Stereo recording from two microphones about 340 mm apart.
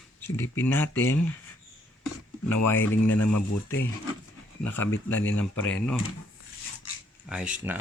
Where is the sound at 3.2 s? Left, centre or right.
Left.